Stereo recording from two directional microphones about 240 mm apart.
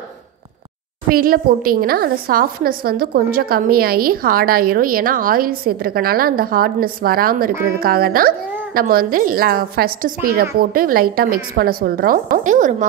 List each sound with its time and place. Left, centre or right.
1.1 s a woman's voice: right